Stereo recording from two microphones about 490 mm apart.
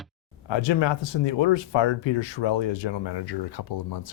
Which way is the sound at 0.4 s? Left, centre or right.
Left.